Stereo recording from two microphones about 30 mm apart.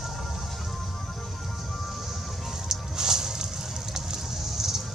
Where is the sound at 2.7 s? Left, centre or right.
Centre.